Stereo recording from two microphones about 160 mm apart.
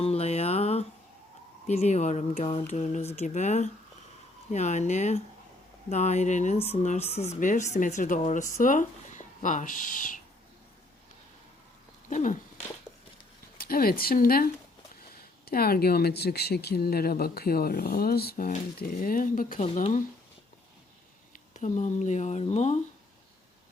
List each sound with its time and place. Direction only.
0.0 s a sound: 40° left (ahead or behind)
1.6 s speech: 45° left (ahead or behind)
12.0 s dog: 50° left (ahead or behind)
13.6 s speech: 70° left (ahead or behind)
19.6 s speech: 40° left (ahead or behind)
21.5 s speech: 50° left (ahead or behind)